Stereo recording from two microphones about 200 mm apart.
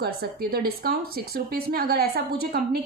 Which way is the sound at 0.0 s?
50° right (ahead or behind).